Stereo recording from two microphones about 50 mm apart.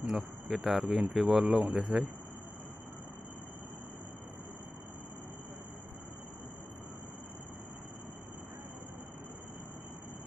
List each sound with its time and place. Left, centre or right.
0.0 s a man's voice: centre
1.4 s a man's voice: centre